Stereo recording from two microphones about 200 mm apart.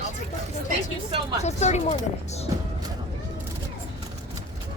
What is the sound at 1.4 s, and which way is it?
Speech, 35° left (ahead or behind).